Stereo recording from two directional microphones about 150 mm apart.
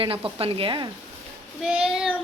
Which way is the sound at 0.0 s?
40° right (ahead or behind).